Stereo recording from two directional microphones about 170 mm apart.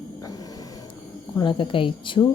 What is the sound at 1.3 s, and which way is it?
Speech, 30° left (ahead or behind).